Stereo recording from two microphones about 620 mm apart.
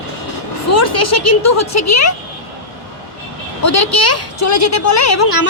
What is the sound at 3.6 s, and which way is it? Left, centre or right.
A woman's voice, left.